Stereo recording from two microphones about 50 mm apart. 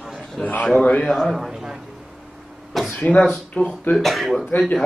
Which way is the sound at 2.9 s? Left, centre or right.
Left.